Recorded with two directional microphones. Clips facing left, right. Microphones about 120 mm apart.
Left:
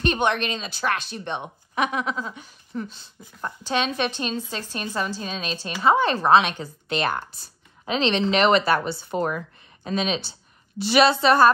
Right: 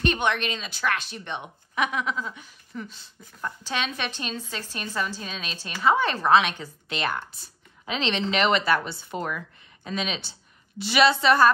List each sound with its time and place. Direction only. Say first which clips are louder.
0.0 s speech: left 2 dB; 35° left (ahead or behind)